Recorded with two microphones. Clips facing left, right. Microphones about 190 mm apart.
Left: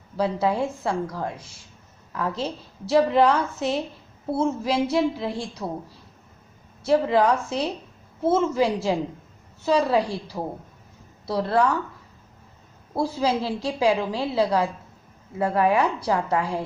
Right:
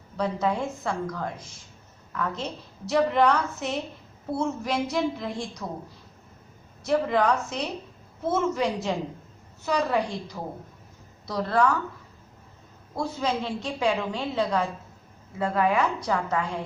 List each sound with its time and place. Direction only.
0.2 s a woman's voice: 30° left (ahead or behind)
6.8 s a woman's voice: 30° left (ahead or behind)
12.9 s a woman's voice: 30° left (ahead or behind)